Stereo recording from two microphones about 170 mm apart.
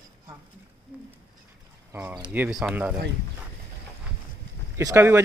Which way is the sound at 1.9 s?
10° right (ahead or behind).